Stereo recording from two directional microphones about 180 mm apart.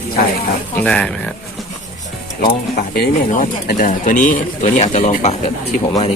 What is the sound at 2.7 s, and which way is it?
Speech, 55° left (ahead or behind).